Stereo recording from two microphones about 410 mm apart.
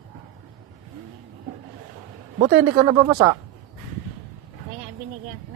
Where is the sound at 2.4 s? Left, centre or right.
Centre.